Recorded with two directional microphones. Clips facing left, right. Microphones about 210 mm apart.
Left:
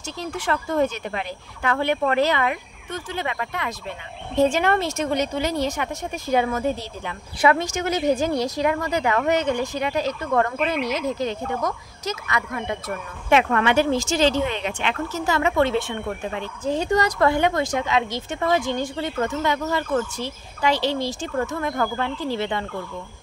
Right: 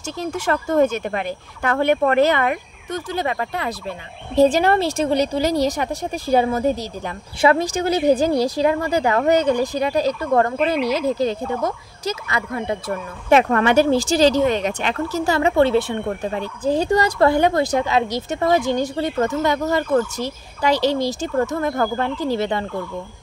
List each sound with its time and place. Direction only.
0.0 s speech: 45° right (ahead or behind)